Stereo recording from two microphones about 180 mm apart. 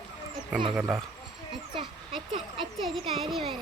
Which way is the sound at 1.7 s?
30° right (ahead or behind).